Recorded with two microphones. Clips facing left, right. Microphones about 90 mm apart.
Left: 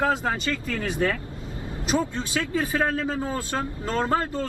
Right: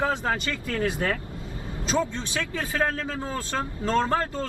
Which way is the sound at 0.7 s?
20° right (ahead or behind).